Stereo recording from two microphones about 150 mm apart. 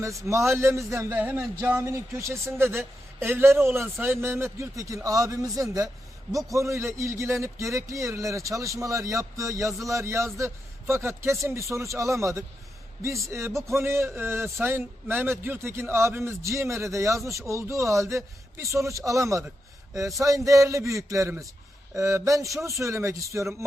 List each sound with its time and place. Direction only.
0.0 s a man's voice: 20° right (ahead or behind)